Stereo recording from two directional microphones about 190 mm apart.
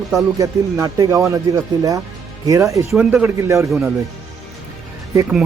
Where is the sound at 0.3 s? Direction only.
15° right (ahead or behind).